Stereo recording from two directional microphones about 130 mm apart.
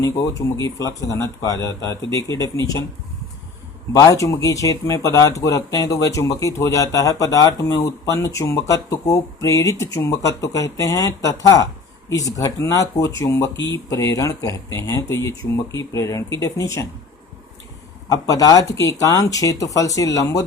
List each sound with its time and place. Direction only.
0.0 s speech: 25° left (ahead or behind)
3.9 s speech: 25° left (ahead or behind)
18.1 s speech: 30° left (ahead or behind)